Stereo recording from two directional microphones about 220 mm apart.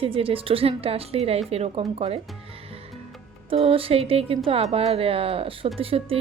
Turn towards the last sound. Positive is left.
turn(degrees=-25)  # may be behind; listen again after turning